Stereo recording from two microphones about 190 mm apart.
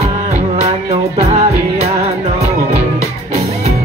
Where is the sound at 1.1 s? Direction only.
35° right (ahead or behind).